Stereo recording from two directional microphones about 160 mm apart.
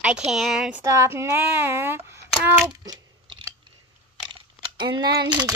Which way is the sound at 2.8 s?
30° right (ahead or behind).